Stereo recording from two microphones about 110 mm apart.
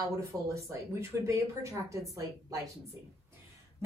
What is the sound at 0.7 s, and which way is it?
A woman's voice, 25° right (ahead or behind).